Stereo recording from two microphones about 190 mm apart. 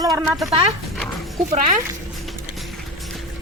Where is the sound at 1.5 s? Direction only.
45° right (ahead or behind).